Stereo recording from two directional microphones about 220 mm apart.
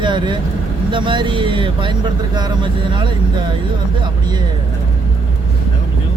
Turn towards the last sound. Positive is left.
turn(degrees=-20)  # may be behind; listen again after turning